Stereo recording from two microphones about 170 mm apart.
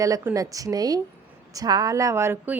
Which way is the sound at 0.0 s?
20° right (ahead or behind).